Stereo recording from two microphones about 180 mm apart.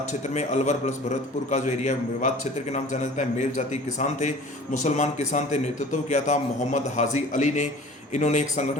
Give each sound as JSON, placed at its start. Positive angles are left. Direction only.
{"t": 0.1, "sound": "a man's voice", "side_deg": 40}